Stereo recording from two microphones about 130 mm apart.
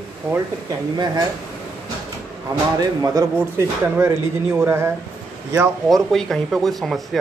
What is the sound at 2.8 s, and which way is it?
Speech, 25° right (ahead or behind).